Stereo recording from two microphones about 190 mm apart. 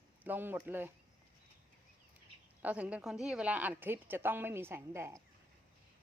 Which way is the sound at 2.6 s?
5° right (ahead or behind).